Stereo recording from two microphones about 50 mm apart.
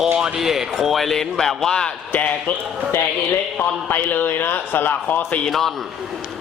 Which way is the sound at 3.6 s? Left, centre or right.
Left.